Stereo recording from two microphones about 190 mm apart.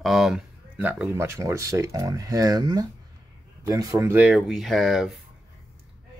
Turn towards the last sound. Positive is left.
turn(degrees=0)  # may be behind; listen again after turning